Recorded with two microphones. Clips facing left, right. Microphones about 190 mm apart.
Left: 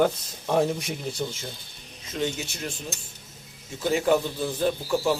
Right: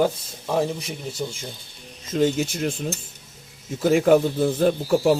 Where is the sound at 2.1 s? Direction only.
50° right (ahead or behind).